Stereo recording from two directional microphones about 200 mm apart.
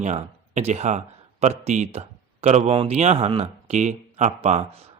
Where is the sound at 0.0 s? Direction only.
35° right (ahead or behind).